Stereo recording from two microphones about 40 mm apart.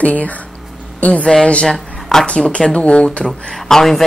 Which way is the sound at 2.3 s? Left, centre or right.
Left.